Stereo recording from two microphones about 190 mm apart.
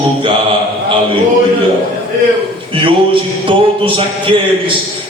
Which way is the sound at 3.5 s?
25° right (ahead or behind).